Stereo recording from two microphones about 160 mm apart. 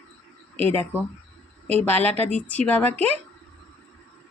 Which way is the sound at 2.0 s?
10° left (ahead or behind).